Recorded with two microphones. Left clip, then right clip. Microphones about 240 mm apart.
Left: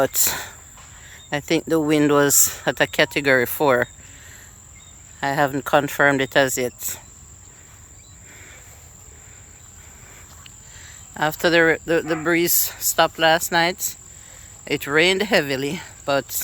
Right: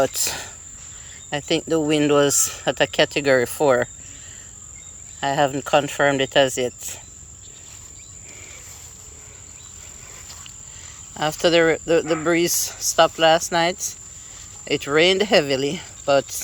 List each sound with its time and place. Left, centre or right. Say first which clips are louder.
0.0 s speech: left 1 dB; centre
5.2 s speech: even; centre
10.4 s speech: right 3 dB; centre